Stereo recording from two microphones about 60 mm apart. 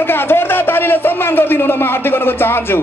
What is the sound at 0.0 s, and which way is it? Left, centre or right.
A man's voice, left.